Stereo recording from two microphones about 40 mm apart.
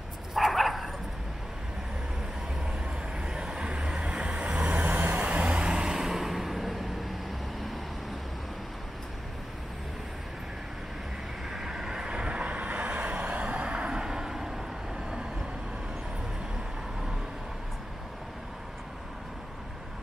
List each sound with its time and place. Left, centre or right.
0.3 s bow-wow: centre
3.2 s vehicle: centre
4.9 s vehicle: right; by 7.8 s centre
11.5 s vehicle: centre